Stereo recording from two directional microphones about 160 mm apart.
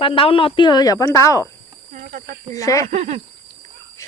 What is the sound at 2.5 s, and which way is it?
Speech, 20° left (ahead or behind).